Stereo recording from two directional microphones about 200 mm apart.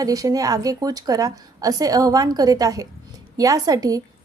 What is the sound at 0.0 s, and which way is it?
A woman's voice, 15° right (ahead or behind).